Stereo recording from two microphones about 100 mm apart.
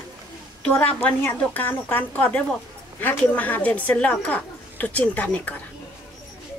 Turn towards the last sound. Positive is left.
turn(degrees=15)  # may be behind; listen again after turning